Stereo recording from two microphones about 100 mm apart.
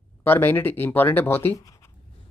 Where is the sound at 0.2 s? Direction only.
20° left (ahead or behind).